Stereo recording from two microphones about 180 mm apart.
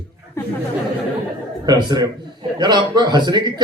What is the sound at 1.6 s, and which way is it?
A man's voice, 25° right (ahead or behind).